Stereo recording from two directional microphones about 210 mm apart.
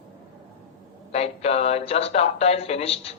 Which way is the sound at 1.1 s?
30° left (ahead or behind).